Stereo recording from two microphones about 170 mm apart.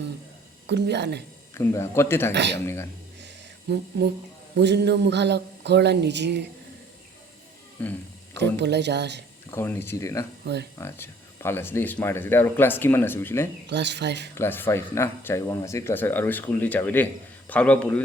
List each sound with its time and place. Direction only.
0.7 s speech: 90° right
1.5 s speech: 15° left (ahead or behind)
2.3 s speech: 90° right
3.2 s a sound: 80° right
4.5 s speech: 80° right
7.8 s speech: 10° left (ahead or behind)
8.4 s speech: 90° right
9.5 s speech: 15° left (ahead or behind)
10.4 s speech: 80° right
10.8 s speech: 15° left (ahead or behind)
13.7 s speech: 90° right
14.3 s speech: 15° left (ahead or behind)